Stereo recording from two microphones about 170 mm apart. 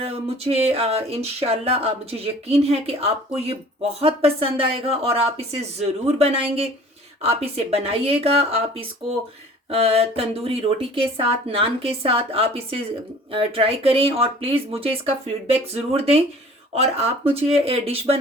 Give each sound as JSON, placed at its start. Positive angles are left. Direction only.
{"t": 0.0, "sound": "speech", "side_deg": -35}